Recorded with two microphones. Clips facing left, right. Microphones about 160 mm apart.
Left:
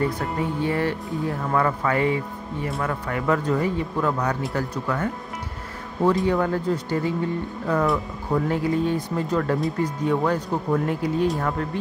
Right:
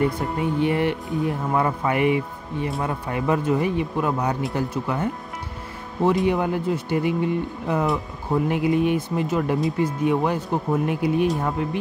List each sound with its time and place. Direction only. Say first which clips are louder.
0.2 s speech: right 3 dB; 20° right (ahead or behind)